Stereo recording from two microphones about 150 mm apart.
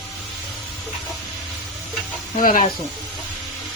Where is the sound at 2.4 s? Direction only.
65° left (ahead or behind).